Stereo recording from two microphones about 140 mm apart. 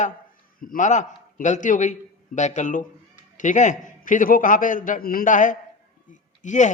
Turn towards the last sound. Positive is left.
turn(degrees=60)  # may be behind; listen again after turning